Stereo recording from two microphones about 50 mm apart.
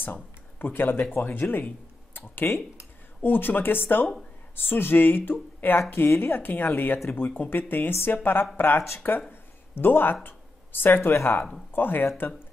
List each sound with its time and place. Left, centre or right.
0.0 s speech: left
10.2 s a sound: left
11.7 s speech: left